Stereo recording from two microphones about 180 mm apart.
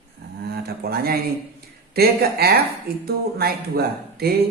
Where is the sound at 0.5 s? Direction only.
60° right (ahead or behind).